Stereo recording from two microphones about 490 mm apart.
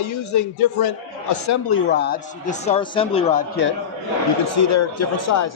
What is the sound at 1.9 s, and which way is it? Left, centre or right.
A man's voice, centre.